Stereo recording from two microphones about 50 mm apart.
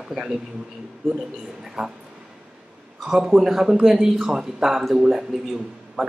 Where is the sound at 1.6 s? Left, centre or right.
Centre.